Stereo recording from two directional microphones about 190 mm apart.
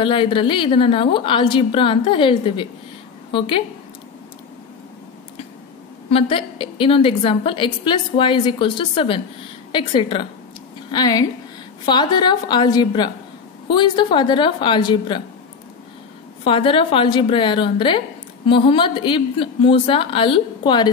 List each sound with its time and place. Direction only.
0.0 s a woman's voice: 25° left (ahead or behind)
6.0 s a woman's voice: 30° left (ahead or behind)
16.4 s a woman's voice: 30° left (ahead or behind)